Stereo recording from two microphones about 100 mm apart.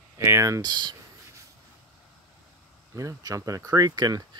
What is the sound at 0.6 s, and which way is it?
Speech, 45° right (ahead or behind).